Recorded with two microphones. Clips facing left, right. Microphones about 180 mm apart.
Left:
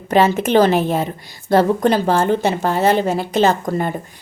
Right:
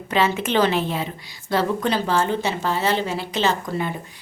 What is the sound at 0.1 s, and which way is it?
A woman's voice, 45° left (ahead or behind).